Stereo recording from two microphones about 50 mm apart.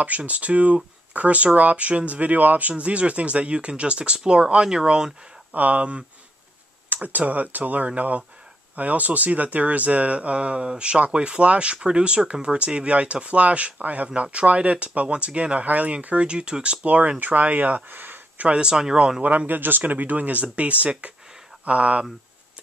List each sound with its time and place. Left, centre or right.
0.0 s speech: right
5.5 s speech: right
16.8 s speech: right
18.5 s speech: centre
19.2 s speech: right